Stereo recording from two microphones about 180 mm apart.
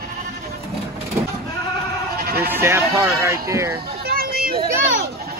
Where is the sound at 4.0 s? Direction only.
55° right (ahead or behind).